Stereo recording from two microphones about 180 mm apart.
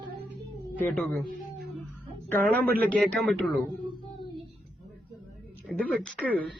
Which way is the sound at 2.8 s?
5° left (ahead or behind).